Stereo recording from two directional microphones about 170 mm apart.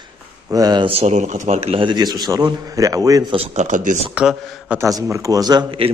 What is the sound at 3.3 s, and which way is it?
Speech, 45° right (ahead or behind).